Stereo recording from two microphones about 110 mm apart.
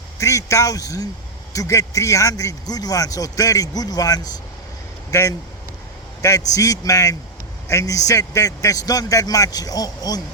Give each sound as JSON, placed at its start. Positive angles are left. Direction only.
{"t": 0.2, "sound": "speech", "side_deg": 30}
{"t": 6.2, "sound": "speech", "side_deg": 30}